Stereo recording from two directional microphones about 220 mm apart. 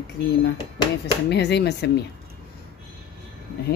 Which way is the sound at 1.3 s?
50° left (ahead or behind).